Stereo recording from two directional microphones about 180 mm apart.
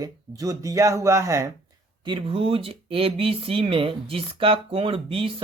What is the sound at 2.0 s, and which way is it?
Speech, 30° right (ahead or behind).